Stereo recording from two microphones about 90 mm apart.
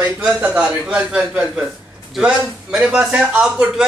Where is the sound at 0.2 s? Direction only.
10° right (ahead or behind).